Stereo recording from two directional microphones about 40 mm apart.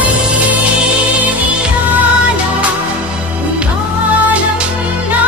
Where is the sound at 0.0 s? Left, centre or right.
Right.